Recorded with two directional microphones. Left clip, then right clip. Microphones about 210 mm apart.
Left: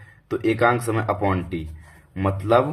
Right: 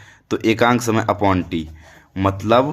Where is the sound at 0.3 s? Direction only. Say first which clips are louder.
Right 3 dB; 35° right (ahead or behind).